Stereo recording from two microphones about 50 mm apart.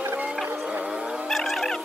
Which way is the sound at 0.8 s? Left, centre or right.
Centre.